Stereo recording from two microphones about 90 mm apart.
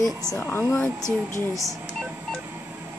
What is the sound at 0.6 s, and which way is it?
Speech, 20° left (ahead or behind).